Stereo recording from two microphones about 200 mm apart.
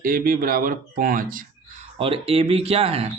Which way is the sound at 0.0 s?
45° right (ahead or behind).